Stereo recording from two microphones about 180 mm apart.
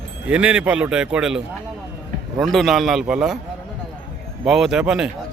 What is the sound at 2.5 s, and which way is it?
Speech, centre (ahead or behind).